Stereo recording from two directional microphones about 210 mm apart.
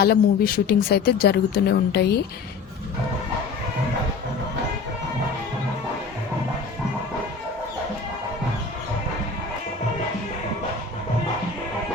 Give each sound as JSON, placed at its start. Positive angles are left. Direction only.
{"t": 0.0, "sound": "speech", "side_deg": 45}